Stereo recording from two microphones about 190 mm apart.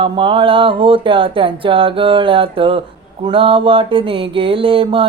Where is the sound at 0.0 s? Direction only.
25° right (ahead or behind).